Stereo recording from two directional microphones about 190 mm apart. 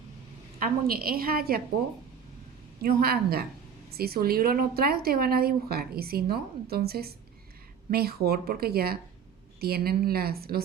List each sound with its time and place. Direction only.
0.6 s speech: 50° right (ahead or behind)
2.8 s speech: 55° right (ahead or behind)